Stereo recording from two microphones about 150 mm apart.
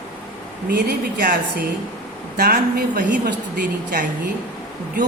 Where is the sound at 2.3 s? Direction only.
85° right; by 4.0 s 65° right (ahead or behind).